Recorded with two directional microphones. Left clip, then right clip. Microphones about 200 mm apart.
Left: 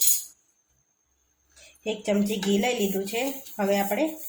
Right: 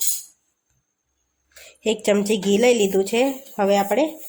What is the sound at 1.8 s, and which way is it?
A woman's voice, 55° right (ahead or behind).